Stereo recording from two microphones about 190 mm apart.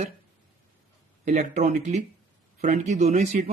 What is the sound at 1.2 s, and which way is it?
Speech, 40° right (ahead or behind).